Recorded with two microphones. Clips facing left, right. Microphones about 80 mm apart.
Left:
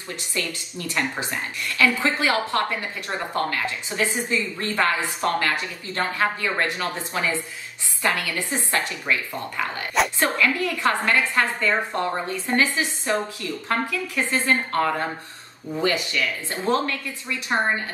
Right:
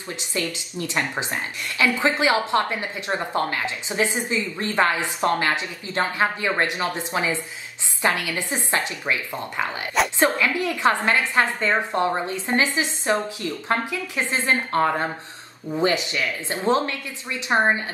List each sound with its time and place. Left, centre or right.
0.2 s a woman's voice: right